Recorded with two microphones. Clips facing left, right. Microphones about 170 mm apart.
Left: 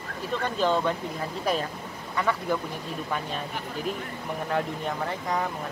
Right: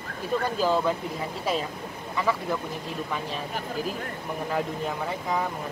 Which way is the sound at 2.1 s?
5° right (ahead or behind).